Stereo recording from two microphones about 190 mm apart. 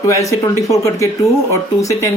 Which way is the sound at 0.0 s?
15° left (ahead or behind).